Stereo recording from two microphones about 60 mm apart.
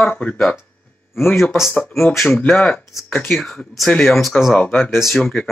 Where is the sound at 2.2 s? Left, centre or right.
Left.